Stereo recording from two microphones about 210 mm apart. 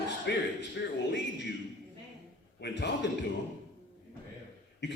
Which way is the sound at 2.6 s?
55° left (ahead or behind).